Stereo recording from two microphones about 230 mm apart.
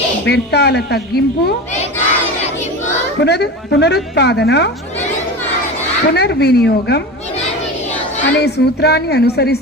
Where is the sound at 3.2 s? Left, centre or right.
Left.